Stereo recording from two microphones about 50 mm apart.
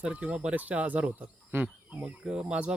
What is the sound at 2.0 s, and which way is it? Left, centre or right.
Speech, centre.